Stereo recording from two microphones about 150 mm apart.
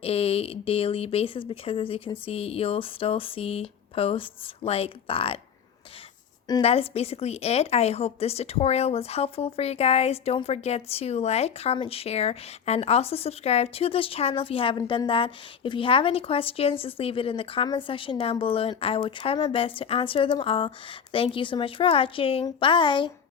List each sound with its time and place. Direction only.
0.0 s a woman's voice: 40° left (ahead or behind)
6.6 s a woman's voice: 40° left (ahead or behind)